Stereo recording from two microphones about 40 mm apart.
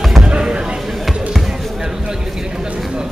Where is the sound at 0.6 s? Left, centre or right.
Centre.